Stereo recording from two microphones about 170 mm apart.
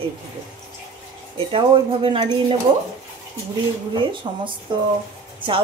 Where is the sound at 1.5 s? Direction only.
30° right (ahead or behind).